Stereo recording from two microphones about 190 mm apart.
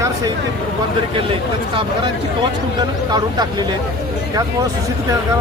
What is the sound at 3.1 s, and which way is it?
Speech, 20° right (ahead or behind).